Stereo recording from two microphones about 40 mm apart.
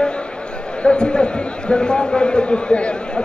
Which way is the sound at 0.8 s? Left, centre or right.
Left.